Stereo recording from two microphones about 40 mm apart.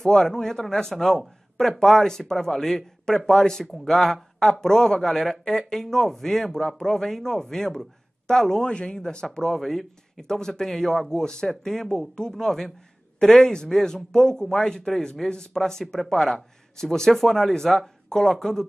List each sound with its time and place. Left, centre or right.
0.0 s a man's voice: centre